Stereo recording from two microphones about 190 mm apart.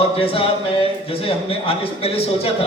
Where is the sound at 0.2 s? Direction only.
30° left (ahead or behind).